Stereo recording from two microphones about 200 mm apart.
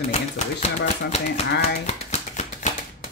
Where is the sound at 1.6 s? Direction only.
35° left (ahead or behind).